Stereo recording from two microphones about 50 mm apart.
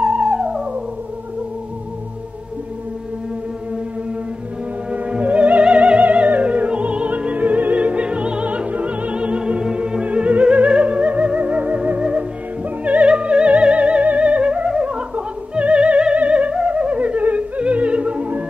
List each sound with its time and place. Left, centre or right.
0.0 s theremin: centre
4.9 s opera: right
12.0 s music: right